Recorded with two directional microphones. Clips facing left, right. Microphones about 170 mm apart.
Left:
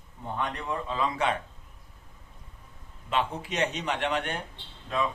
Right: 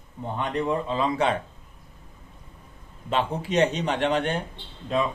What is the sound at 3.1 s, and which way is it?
Speech, 35° right (ahead or behind).